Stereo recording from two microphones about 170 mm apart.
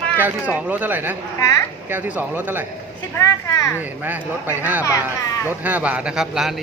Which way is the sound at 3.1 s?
15° left (ahead or behind).